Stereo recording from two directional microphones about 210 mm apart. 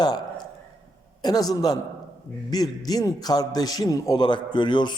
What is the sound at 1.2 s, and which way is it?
A man's voice, 20° left (ahead or behind).